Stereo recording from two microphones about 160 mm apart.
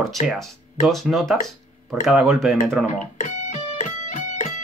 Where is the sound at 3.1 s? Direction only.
50° left (ahead or behind).